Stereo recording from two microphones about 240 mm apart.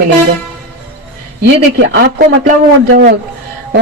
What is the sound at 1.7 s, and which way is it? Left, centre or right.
A man's voice, right.